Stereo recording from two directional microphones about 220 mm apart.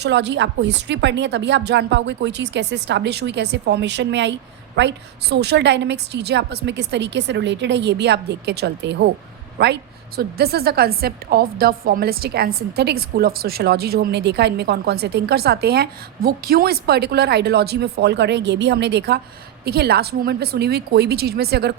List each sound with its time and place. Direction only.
0.0 s a woman's voice: 50° right (ahead or behind)